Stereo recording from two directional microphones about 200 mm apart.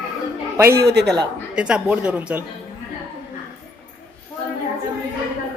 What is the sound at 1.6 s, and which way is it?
Speech, 5° right (ahead or behind).